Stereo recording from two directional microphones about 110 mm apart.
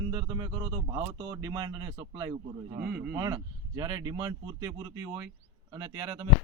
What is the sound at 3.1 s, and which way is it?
Speech, 40° right (ahead or behind).